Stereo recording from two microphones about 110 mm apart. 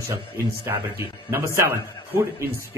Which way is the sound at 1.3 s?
25° right (ahead or behind).